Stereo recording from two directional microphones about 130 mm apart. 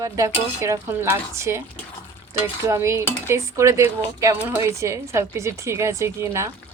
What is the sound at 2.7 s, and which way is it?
Speech, 20° right (ahead or behind).